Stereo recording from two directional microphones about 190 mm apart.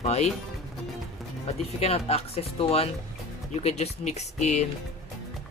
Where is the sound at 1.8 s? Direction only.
30° left (ahead or behind).